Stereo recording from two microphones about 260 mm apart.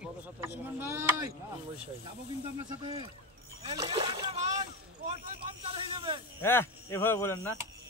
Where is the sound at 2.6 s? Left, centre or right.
Centre.